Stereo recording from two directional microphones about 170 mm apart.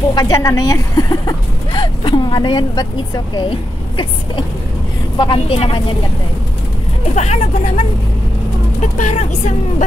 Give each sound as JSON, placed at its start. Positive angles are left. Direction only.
{"t": 0.1, "sound": "a woman's voice", "side_deg": 20}
{"t": 7.2, "sound": "a woman's voice", "side_deg": 40}
{"t": 8.9, "sound": "speech", "side_deg": 45}